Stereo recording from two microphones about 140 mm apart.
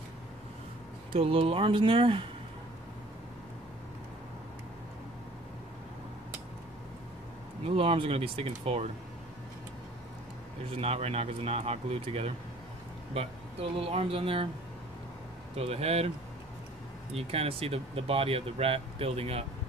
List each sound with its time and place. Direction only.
1.1 s speech: 40° right (ahead or behind)
7.6 s speech: 40° right (ahead or behind)
10.7 s speech: 45° right (ahead or behind)
15.5 s speech: 45° right (ahead or behind)
17.1 s speech: 45° right (ahead or behind)